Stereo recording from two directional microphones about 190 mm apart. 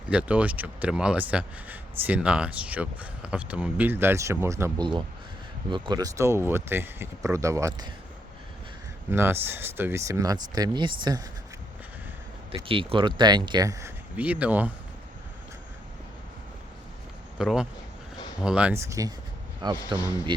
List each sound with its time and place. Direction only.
0.1 s speech: 5° right (ahead or behind)
9.0 s speech: 10° right (ahead or behind)
12.6 s speech: 30° right (ahead or behind); by 14.7 s 5° right (ahead or behind)
17.3 s speech: 5° right (ahead or behind); by 19.8 s 25° right (ahead or behind)